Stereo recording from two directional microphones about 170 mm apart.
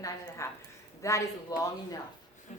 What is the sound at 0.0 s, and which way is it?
A woman's voice, 15° left (ahead or behind).